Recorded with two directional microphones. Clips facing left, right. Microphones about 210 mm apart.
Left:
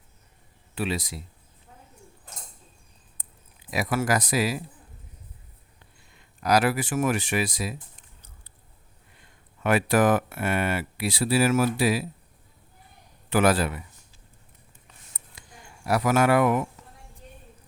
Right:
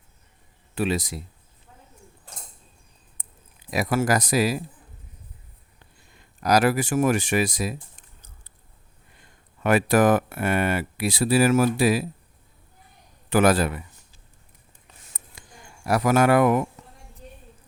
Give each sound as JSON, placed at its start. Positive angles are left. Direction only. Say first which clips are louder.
{"t": 0.8, "sound": "speech", "louder": "right 4 dB", "side_deg": -45}
{"t": 3.7, "sound": "speech", "louder": "right 3 dB", "side_deg": -40}
{"t": 6.4, "sound": "speech", "louder": "right 2 dB", "side_deg": -40}
{"t": 9.6, "sound": "speech", "louder": "right 2 dB", "side_deg": -45}
{"t": 13.3, "sound": "speech", "louder": "right 2 dB", "side_deg": -45}
{"t": 15.9, "sound": "speech", "louder": "right 2 dB", "side_deg": -45}